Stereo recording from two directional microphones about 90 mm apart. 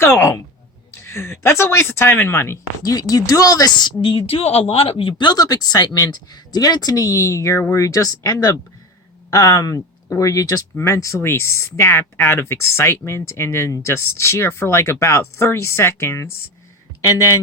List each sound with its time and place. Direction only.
0.0 s a sound: 30° left (ahead or behind)
1.0 s speech: 30° left (ahead or behind)
2.8 s speech: 45° left (ahead or behind)
4.0 s speech: 90° left; by 8.3 s 40° left (ahead or behind)
9.3 s speech: 35° left (ahead or behind)